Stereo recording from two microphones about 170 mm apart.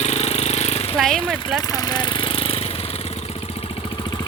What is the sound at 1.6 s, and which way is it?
Vehicle, 20° left (ahead or behind).